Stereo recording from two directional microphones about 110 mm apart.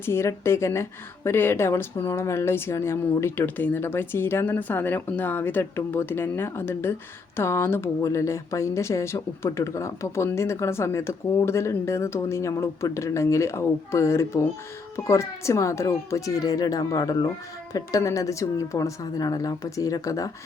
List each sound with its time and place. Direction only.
0.0 s a woman's voice: 25° left (ahead or behind)